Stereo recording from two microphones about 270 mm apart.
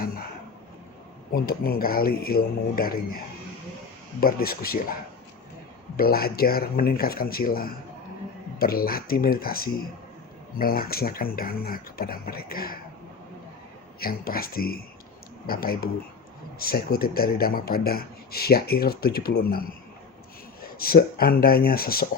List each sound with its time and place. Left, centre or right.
1.3 s speech: left
4.2 s speech: left
6.0 s speech: left
14.0 s speech: left